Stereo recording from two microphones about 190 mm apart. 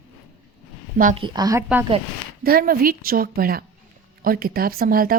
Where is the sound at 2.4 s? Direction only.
50° right (ahead or behind).